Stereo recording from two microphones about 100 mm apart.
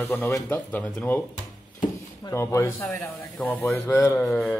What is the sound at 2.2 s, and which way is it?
Speech, 30° left (ahead or behind).